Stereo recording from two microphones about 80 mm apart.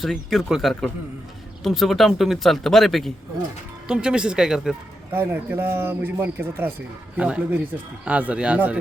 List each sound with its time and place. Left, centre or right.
0.0 s speech: centre
3.8 s speech: centre
5.1 s speech: right